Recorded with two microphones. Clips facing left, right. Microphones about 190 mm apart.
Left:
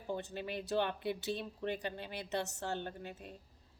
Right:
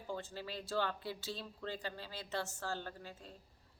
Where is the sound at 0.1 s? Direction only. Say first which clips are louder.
Left 4 dB; 20° left (ahead or behind).